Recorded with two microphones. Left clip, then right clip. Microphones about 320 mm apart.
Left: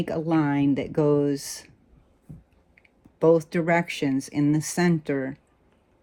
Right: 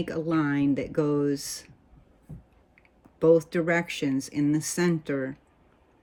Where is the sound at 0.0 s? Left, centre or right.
Centre.